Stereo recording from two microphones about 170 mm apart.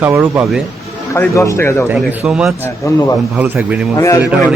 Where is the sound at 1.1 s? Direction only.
15° left (ahead or behind).